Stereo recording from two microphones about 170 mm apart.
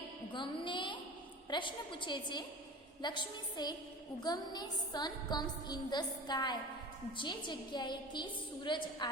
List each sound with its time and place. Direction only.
0.3 s a woman's voice: 30° left (ahead or behind)